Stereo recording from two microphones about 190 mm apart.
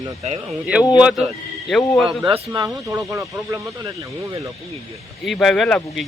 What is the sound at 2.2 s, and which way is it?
Speech, 25° right (ahead or behind).